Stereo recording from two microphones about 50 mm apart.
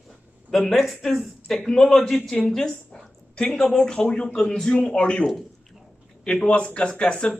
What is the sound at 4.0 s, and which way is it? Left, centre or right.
A man's voice, left.